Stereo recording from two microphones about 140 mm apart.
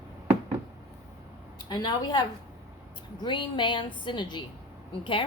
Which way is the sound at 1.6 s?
30° left (ahead or behind).